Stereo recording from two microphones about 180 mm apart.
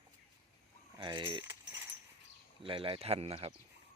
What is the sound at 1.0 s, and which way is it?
Speech, 25° right (ahead or behind).